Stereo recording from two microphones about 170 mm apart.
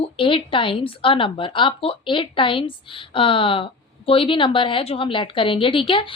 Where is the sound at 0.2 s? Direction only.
30° left (ahead or behind).